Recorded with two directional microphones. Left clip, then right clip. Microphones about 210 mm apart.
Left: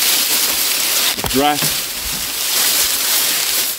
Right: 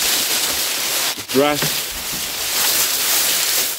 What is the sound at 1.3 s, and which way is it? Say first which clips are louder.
Speech: even; 35° left (ahead or behind).